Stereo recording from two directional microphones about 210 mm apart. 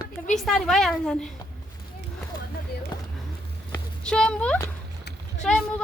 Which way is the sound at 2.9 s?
20° left (ahead or behind).